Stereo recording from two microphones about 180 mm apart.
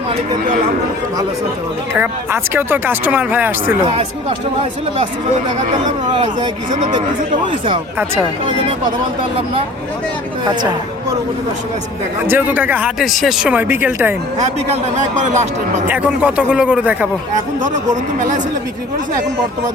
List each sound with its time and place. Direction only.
2.0 s speech: 10° right (ahead or behind)
6.7 s speech: 40° right (ahead or behind)
7.4 s speech: 30° right (ahead or behind)
10.4 s speech: 25° right (ahead or behind)
12.3 s speech: 10° right (ahead or behind)
14.9 s speech: 40° right (ahead or behind)
15.9 s speech: 5° right (ahead or behind)
17.3 s speech: 45° right (ahead or behind)